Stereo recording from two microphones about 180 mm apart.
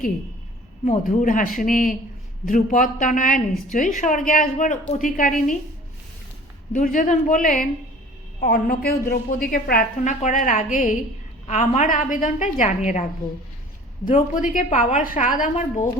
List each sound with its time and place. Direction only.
0.9 s a woman's voice: 45° left (ahead or behind)
6.7 s a woman's voice: 45° left (ahead or behind)